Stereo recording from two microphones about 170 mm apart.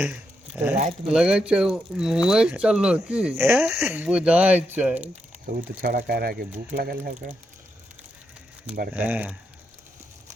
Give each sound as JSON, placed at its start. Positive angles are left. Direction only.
{"t": 0.0, "sound": "a sound", "side_deg": -5}
{"t": 1.0, "sound": "speech", "side_deg": -5}
{"t": 5.5, "sound": "speech", "side_deg": -55}
{"t": 9.0, "sound": "speech", "side_deg": -10}